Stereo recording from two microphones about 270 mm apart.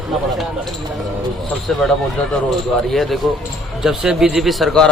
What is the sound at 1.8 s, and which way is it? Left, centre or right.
A man's voice, centre.